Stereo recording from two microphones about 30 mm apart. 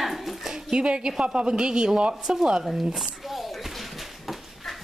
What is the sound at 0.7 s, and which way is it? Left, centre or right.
Speech, right.